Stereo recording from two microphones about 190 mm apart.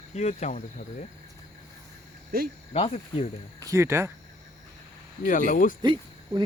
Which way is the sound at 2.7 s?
35° left (ahead or behind).